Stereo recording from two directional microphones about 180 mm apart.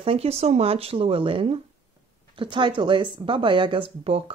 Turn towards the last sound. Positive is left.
turn(degrees=-30)  # may be behind; listen again after turning